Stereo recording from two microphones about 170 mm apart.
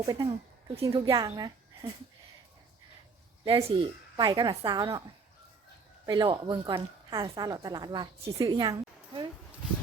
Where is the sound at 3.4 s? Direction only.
30° right (ahead or behind).